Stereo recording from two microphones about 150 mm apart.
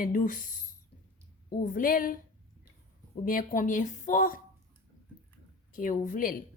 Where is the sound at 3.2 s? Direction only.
65° left (ahead or behind).